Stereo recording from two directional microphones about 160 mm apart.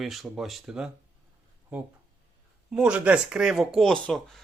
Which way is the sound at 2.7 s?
5° right (ahead or behind).